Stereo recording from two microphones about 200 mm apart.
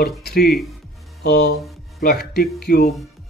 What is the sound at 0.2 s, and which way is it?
Speech, 50° left (ahead or behind).